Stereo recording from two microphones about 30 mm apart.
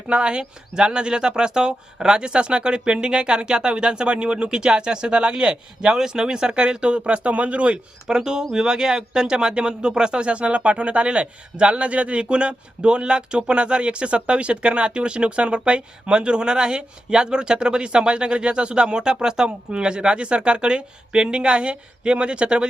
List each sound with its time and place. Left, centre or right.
0.1 s speech: right
8.0 s speech: right